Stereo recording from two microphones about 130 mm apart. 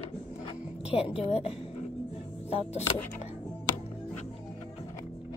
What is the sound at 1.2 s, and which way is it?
Music, 50° left (ahead or behind).